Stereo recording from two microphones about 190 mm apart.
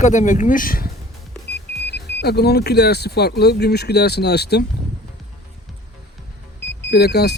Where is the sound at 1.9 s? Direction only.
60° left (ahead or behind).